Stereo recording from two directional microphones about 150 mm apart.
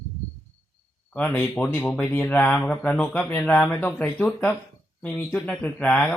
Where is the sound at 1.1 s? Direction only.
10° left (ahead or behind).